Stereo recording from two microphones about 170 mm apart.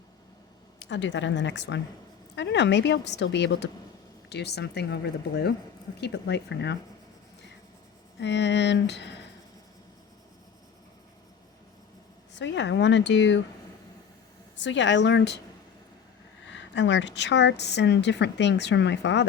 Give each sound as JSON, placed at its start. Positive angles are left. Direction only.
{"t": 0.8, "sound": "speech", "side_deg": 90}
{"t": 4.3, "sound": "speech", "side_deg": 75}
{"t": 6.0, "sound": "speech", "side_deg": 90}
{"t": 8.2, "sound": "speech", "side_deg": 90}
{"t": 12.4, "sound": "speech", "side_deg": 90}
{"t": 14.6, "sound": "speech", "side_deg": 90}
{"t": 16.5, "sound": "speech", "side_deg": 90}